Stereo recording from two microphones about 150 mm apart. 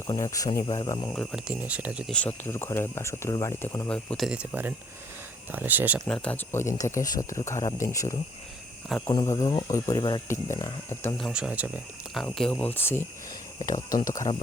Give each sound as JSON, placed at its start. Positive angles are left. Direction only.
{"t": 0.1, "sound": "speech", "side_deg": 20}
{"t": 1.1, "sound": "speech", "side_deg": 5}
{"t": 1.5, "sound": "speech", "side_deg": -10}
{"t": 2.1, "sound": "speech", "side_deg": 10}
{"t": 3.8, "sound": "speech", "side_deg": 10}
{"t": 4.3, "sound": "speech", "side_deg": -10}
{"t": 6.1, "sound": "speech", "side_deg": 10}
{"t": 11.2, "sound": "speech", "side_deg": -5}
{"t": 12.2, "sound": "speech", "side_deg": 5}
{"t": 14.1, "sound": "speech", "side_deg": 30}